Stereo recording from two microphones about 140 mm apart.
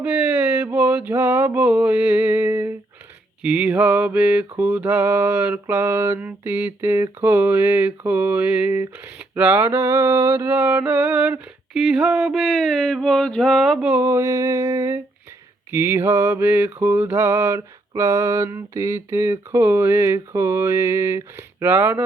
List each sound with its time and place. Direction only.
0.0 s a sound: 10° right (ahead or behind)
3.4 s mantra: 10° right (ahead or behind)
13.9 s mantra: 15° right (ahead or behind)